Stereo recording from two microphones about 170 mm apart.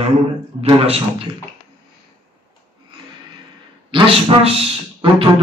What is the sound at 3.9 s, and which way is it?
Speech, 35° right (ahead or behind).